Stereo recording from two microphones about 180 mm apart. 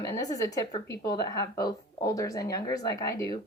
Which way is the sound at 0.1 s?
20° left (ahead or behind).